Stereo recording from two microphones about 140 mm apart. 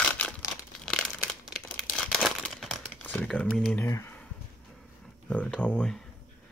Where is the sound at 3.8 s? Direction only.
20° left (ahead or behind).